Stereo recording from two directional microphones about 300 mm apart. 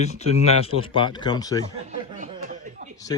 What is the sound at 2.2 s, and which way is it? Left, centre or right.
Chuckle, right.